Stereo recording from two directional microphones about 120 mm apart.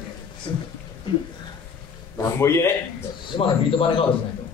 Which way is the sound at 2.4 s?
20° left (ahead or behind).